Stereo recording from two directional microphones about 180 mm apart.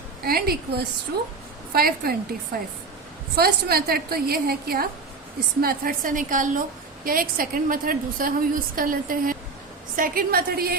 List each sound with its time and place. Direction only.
0.3 s a woman's voice: 55° right (ahead or behind)